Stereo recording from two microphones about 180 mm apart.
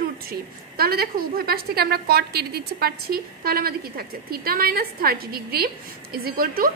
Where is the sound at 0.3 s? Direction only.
60° right (ahead or behind).